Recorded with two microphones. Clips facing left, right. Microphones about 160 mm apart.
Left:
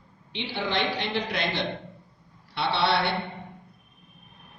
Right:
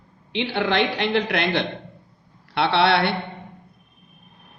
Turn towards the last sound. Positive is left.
turn(degrees=-65)  # may be behind; listen again after turning